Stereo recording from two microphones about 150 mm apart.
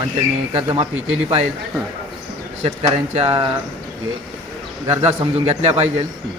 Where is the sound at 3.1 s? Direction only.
40° right (ahead or behind).